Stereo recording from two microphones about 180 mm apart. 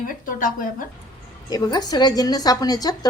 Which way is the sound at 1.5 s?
20° left (ahead or behind).